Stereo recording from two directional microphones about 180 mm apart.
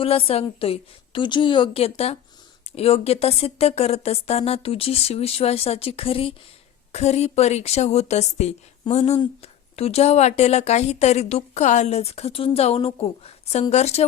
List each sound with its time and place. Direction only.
0.0 s a woman's voice: 30° left (ahead or behind)